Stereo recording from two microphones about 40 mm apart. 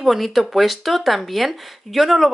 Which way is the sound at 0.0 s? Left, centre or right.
Centre.